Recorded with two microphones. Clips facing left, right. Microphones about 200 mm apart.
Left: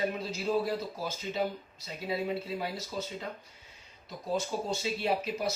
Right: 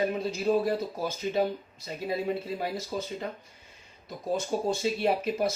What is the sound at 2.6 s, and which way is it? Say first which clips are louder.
Speech: right 4 dB; 50° right (ahead or behind).